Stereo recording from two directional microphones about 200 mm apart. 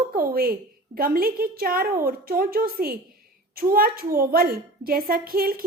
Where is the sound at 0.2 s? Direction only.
45° right (ahead or behind).